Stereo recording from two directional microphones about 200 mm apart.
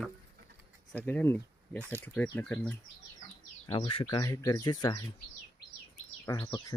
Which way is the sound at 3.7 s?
25° left (ahead or behind).